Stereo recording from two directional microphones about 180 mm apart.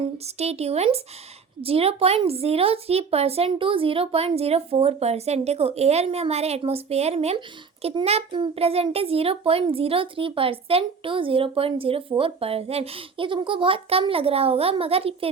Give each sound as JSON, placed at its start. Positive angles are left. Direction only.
{"t": 0.0, "sound": "speech", "side_deg": -35}